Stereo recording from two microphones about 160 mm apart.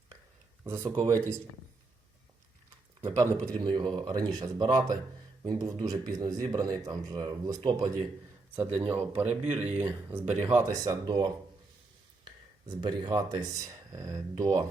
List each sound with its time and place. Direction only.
0.6 s speech: 15° right (ahead or behind)
3.2 s speech: 20° right (ahead or behind)
8.7 s speech: 35° right (ahead or behind)
9.5 s speech: 10° right (ahead or behind)